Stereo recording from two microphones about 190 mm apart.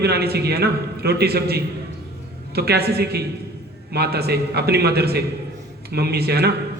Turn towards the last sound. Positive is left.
turn(degrees=-55)  # may be behind; listen again after turning